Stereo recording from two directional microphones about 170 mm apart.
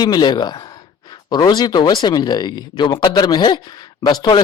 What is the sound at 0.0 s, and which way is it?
Speech, 25° left (ahead or behind).